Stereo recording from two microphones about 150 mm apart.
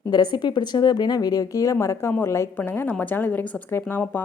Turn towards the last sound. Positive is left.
turn(degrees=15)  # may be behind; listen again after turning